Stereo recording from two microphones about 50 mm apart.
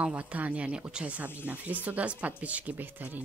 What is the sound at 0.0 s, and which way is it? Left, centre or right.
A woman's voice, right.